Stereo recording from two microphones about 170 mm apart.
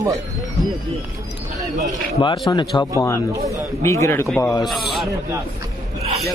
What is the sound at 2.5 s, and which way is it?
A man's voice, 25° left (ahead or behind).